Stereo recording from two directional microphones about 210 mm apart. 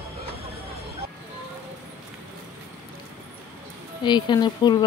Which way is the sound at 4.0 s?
20° left (ahead or behind).